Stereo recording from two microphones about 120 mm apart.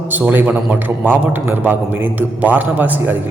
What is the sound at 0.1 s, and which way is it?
A man's voice, 15° right (ahead or behind).